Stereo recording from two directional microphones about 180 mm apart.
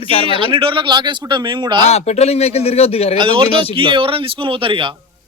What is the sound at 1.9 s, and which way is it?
Speech, 35° left (ahead or behind).